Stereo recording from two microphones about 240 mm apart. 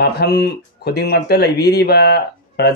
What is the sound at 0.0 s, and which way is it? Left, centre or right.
Speech, left.